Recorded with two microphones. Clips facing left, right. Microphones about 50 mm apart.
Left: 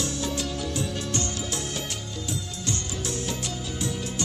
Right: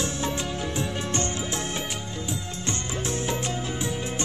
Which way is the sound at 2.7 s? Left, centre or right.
Right.